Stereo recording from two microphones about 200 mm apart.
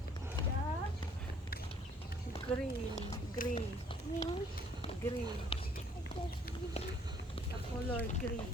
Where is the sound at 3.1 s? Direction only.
35° left (ahead or behind).